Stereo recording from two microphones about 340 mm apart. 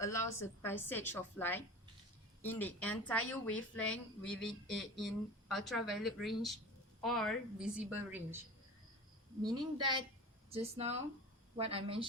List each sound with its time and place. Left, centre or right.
0.0 s a woman's voice: centre
9.4 s a woman's voice: centre